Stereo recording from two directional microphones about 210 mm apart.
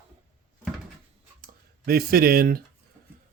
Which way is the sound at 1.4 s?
45° right (ahead or behind).